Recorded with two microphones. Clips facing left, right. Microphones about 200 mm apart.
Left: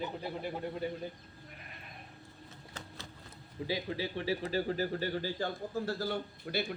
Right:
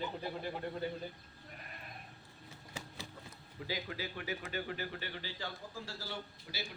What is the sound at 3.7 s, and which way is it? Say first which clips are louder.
Speech: left 5 dB; 25° left (ahead or behind).